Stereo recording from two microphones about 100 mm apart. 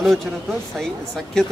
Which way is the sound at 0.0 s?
Centre (ahead or behind).